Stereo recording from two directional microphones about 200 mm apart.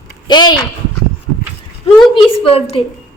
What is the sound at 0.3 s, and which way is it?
Speech, 20° left (ahead or behind).